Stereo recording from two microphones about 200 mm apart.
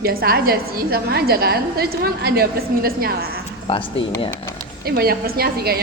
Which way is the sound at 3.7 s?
25° left (ahead or behind).